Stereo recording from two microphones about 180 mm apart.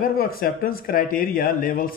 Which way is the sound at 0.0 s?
55° left (ahead or behind).